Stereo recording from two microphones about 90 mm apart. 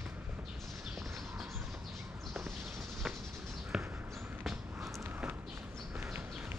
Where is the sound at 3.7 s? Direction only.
10° right (ahead or behind).